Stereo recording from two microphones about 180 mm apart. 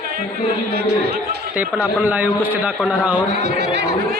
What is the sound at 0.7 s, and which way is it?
Speech, 60° right (ahead or behind).